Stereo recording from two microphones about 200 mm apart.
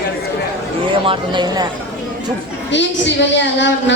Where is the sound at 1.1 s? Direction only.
20° right (ahead or behind).